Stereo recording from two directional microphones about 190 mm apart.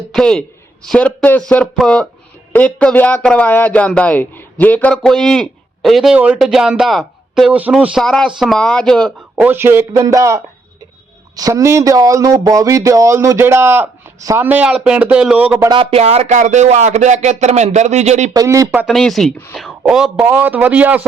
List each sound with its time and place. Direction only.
0.1 s a man's voice: 5° left (ahead or behind)
9.4 s speech: 10° right (ahead or behind)
15.5 s speech: 20° right (ahead or behind)
15.8 s speech: 30° right (ahead or behind)
18.3 s speech: 15° right (ahead or behind)
18.9 s a man's voice: centre (ahead or behind)